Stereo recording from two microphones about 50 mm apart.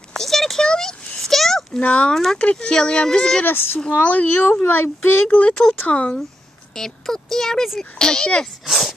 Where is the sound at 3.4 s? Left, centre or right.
Left.